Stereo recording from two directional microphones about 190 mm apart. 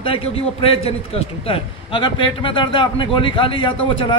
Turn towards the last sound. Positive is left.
turn(degrees=25)  # may be behind; listen again after turning